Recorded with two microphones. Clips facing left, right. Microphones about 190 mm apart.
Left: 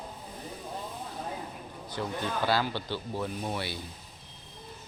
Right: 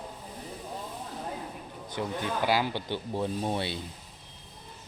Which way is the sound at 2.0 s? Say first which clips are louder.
Right 1 dB; 15° right (ahead or behind).